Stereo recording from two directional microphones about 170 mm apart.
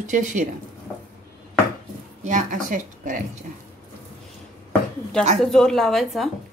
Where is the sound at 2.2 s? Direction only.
50° right (ahead or behind).